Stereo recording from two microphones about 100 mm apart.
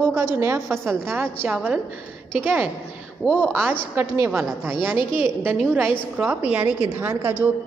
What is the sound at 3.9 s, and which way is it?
A woman's voice, 20° right (ahead or behind).